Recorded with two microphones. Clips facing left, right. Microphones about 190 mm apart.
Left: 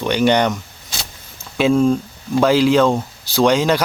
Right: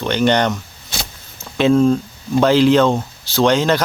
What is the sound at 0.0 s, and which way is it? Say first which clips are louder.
Speech: even; 10° left (ahead or behind).